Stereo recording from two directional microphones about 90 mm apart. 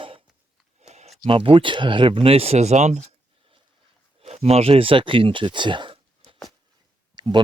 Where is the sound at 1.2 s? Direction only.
75° right (ahead or behind); by 2.5 s 90° right.